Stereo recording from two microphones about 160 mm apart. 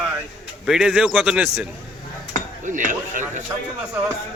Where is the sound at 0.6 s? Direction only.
5° right (ahead or behind).